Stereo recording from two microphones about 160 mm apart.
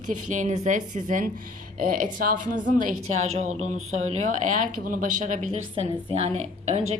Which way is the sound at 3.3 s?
45° right (ahead or behind).